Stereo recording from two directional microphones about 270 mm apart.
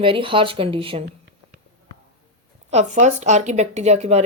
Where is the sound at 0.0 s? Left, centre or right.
Centre.